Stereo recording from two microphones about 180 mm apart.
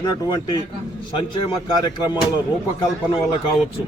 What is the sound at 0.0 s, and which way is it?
Speech, 25° left (ahead or behind).